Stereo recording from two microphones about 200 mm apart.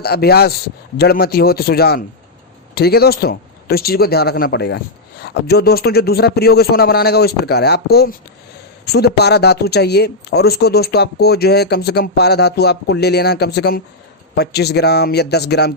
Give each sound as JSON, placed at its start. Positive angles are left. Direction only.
{"t": 0.0, "sound": "speech", "side_deg": 50}